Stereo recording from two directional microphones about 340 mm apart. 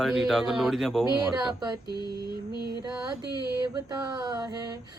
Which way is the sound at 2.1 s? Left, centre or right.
Right.